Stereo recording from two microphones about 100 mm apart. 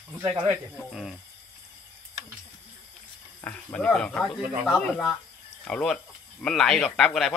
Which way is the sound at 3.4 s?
15° left (ahead or behind).